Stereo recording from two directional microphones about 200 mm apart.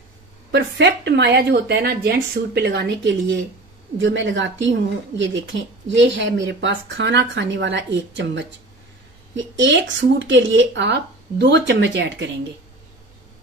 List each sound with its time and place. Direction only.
0.5 s a woman's voice: 60° right (ahead or behind)